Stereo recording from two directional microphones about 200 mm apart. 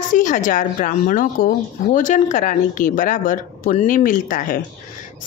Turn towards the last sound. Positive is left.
turn(degrees=45)  # may be behind; listen again after turning